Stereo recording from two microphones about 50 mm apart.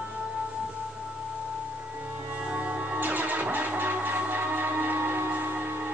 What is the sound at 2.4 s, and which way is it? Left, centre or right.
Music, right.